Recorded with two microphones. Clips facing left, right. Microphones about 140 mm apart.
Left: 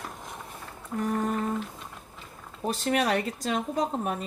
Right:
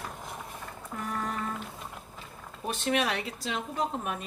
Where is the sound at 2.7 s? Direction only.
40° left (ahead or behind).